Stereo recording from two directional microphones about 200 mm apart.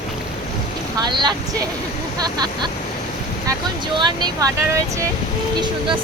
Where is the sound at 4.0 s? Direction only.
20° right (ahead or behind).